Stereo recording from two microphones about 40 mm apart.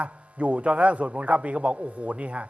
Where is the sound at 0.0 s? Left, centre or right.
Right.